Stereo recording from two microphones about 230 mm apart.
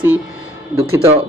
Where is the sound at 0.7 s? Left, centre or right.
Right.